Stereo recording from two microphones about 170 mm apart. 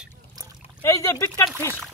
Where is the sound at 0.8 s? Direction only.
15° left (ahead or behind).